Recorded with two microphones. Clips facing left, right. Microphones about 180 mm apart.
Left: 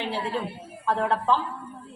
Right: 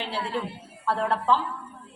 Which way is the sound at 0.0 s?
15° left (ahead or behind).